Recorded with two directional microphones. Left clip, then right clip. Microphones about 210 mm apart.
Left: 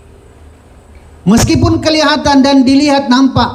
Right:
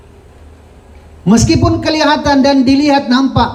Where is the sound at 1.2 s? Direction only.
55° left (ahead or behind).